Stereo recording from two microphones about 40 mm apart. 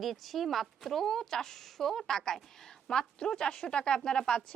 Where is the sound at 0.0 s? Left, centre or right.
Centre.